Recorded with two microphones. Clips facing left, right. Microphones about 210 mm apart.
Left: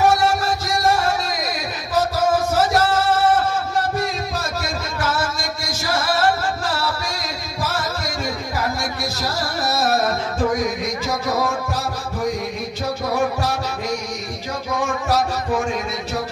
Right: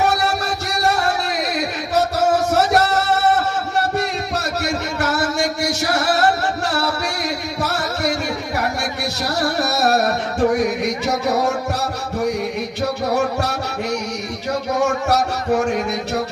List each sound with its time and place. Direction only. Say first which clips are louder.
0.0 s music: left 2 dB; 70° right (ahead or behind)
4.6 s music: right 3 dB; 65° right (ahead or behind)
7.6 s music: right 2 dB; 70° right (ahead or behind)
9.2 s music: right 5 dB; 70° right (ahead or behind)
15.0 s a sound: right 2 dB; 70° right (ahead or behind)